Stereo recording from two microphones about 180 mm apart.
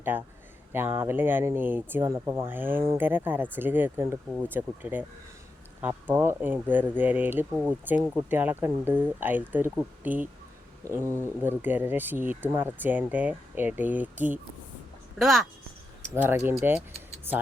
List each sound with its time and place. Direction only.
0.0 s speech: 10° right (ahead or behind)
16.1 s speech: 10° right (ahead or behind)